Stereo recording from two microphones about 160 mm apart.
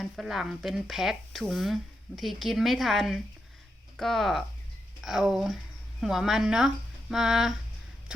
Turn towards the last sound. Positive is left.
turn(degrees=0)  # may be behind; listen again after turning